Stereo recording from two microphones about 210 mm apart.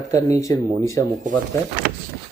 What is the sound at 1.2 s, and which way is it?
Speech, 40° right (ahead or behind).